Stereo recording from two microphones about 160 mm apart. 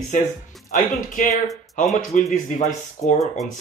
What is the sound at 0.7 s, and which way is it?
Speech, 55° left (ahead or behind).